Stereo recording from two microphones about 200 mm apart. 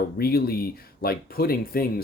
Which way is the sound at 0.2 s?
50° left (ahead or behind).